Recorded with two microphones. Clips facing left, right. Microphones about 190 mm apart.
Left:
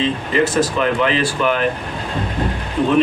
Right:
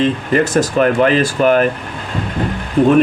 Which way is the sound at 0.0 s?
45° right (ahead or behind).